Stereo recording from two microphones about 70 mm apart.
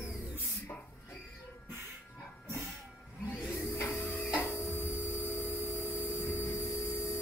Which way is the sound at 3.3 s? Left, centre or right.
Left.